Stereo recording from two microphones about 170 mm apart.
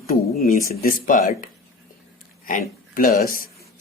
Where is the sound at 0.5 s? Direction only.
55° left (ahead or behind).